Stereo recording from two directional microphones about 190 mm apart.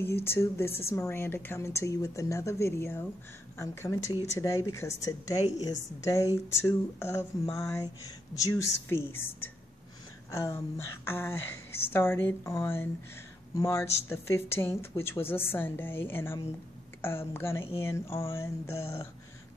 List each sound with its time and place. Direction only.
0.0 s a woman's voice: 10° left (ahead or behind)